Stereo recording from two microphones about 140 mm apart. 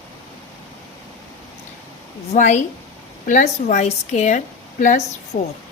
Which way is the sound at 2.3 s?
55° left (ahead or behind).